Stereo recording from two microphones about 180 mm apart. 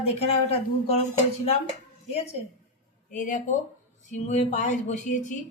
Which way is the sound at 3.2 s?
45° left (ahead or behind).